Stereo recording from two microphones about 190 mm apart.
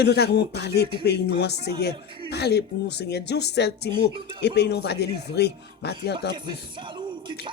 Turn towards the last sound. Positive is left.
turn(degrees=60)  # may be behind; listen again after turning